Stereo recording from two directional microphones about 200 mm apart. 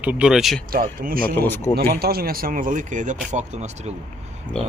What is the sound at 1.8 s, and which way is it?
Speech, 50° right (ahead or behind).